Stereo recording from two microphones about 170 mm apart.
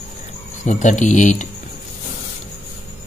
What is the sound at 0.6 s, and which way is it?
Speech, 45° left (ahead or behind).